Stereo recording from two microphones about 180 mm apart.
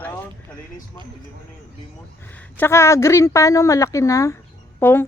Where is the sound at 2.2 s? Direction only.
10° left (ahead or behind).